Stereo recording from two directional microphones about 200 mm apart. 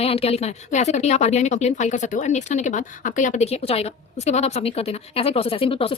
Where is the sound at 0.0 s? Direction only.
30° left (ahead or behind).